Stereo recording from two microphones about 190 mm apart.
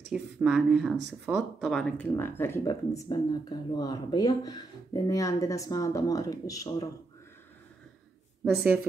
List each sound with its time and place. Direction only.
0.1 s speech: 5° right (ahead or behind); by 6.9 s 20° left (ahead or behind)